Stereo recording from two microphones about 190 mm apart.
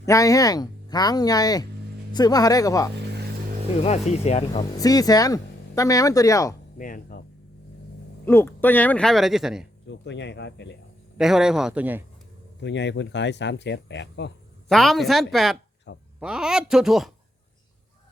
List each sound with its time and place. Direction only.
0.0 s speech: 15° left (ahead or behind)
3.8 s speech: 35° left (ahead or behind)
4.8 s speech: 20° left (ahead or behind)
6.7 s speech: 45° left (ahead or behind)
8.2 s speech: 10° left (ahead or behind)
9.9 s speech: 70° left (ahead or behind)
11.2 s speech: 5° right (ahead or behind)
12.6 s speech: 70° left (ahead or behind)
14.7 s speech: centre (ahead or behind)
15.9 s speech: 70° left (ahead or behind)
16.2 s speech: 5° right (ahead or behind)